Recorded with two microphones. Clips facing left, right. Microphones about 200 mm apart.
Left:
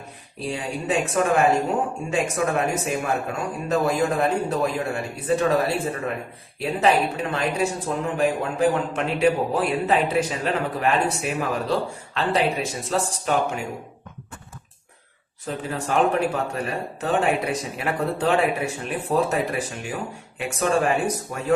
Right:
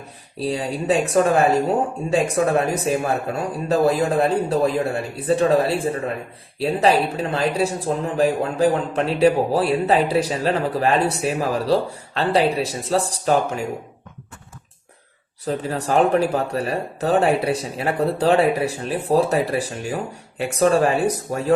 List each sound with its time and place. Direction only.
0.3 s a man's voice: 35° right (ahead or behind)
15.4 s a man's voice: 35° right (ahead or behind)